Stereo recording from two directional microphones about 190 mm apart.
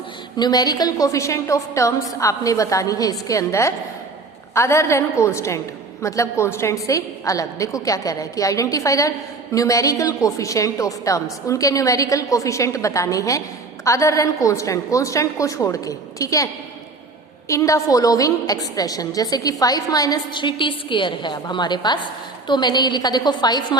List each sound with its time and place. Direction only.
0.3 s a woman's voice: 20° left (ahead or behind)
17.5 s a woman's voice: 15° left (ahead or behind)